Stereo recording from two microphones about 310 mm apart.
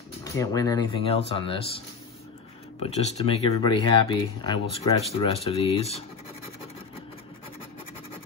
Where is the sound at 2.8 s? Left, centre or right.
Centre.